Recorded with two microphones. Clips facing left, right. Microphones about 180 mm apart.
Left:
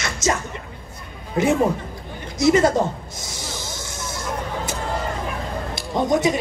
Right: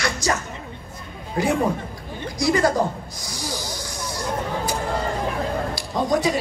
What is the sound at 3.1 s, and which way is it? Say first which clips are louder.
Vehicle: right 2 dB; 25° left (ahead or behind).